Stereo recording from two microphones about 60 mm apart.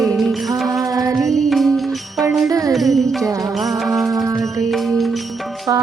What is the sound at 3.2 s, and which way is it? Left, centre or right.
Music, right.